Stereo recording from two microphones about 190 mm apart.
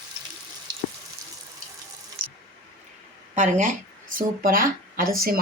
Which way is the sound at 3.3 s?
40° right (ahead or behind).